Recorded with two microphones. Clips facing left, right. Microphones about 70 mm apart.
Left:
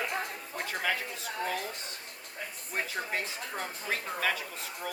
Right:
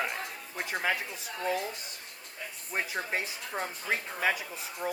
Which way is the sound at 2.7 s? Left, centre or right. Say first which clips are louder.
Right 2 dB; centre.